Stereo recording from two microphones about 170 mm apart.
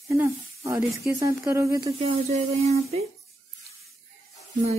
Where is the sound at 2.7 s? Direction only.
40° right (ahead or behind).